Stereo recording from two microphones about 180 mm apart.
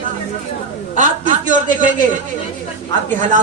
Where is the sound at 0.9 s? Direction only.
45° right (ahead or behind).